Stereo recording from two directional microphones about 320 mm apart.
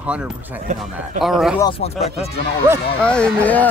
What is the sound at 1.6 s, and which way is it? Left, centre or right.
Speech, centre.